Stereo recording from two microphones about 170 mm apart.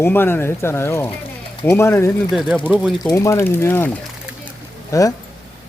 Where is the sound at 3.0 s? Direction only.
15° left (ahead or behind).